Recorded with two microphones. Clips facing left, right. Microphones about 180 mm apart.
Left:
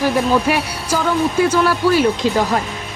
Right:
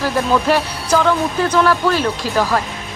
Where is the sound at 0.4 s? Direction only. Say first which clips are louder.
Right 2 dB; 10° left (ahead or behind).